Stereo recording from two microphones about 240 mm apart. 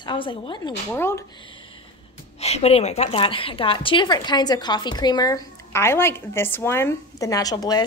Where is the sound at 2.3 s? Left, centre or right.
Left.